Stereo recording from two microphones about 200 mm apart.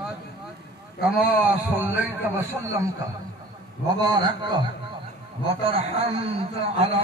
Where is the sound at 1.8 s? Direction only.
10° right (ahead or behind).